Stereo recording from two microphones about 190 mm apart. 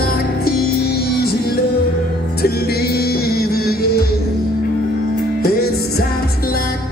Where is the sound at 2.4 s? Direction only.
55° left (ahead or behind).